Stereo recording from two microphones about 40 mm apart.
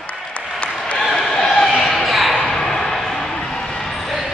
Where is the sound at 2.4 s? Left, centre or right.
Centre.